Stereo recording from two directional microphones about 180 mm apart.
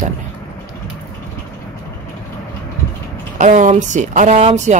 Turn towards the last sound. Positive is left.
turn(degrees=-40)  # may be behind; listen again after turning